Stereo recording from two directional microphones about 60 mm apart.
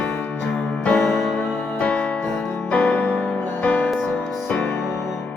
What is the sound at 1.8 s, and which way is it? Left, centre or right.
Music, left.